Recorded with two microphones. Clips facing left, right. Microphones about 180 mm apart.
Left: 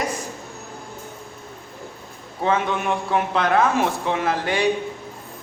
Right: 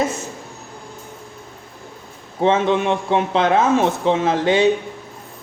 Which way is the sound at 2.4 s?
30° right (ahead or behind).